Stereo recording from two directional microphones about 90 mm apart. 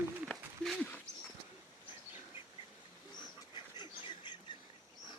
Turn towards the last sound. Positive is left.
turn(degrees=60)  # may be behind; listen again after turning